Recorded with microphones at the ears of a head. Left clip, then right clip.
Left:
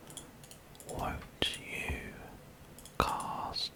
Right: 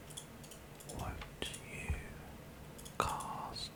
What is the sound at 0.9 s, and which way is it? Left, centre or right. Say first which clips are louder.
Whispering: left 8 dB; left.